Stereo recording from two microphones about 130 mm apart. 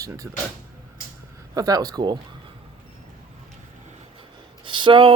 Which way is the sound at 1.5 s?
30° right (ahead or behind).